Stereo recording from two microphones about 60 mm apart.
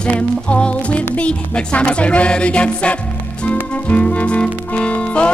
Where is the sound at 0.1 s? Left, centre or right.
Centre.